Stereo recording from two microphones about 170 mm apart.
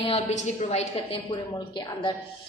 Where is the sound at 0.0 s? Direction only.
35° left (ahead or behind).